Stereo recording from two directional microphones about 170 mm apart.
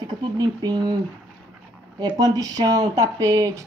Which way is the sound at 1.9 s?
25° right (ahead or behind).